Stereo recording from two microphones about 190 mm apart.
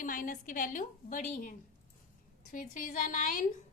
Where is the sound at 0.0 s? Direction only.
45° left (ahead or behind).